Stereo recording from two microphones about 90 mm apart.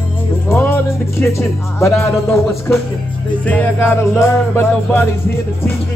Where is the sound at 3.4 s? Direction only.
15° left (ahead or behind).